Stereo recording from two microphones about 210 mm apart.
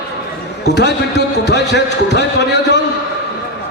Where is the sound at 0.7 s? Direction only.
55° left (ahead or behind).